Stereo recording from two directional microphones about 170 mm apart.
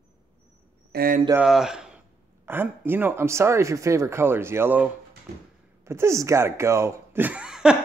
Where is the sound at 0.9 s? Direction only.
60° right (ahead or behind).